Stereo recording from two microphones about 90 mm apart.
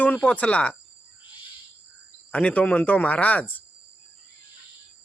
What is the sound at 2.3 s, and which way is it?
Speech, 15° left (ahead or behind).